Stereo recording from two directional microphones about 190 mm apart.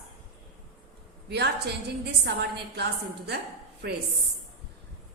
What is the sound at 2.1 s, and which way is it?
A woman's voice, 60° right (ahead or behind).